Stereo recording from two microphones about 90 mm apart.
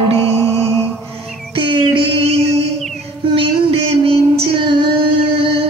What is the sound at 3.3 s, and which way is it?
Female singing, 85° right.